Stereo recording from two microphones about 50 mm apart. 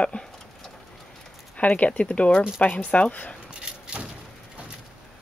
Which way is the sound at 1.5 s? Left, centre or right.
Left.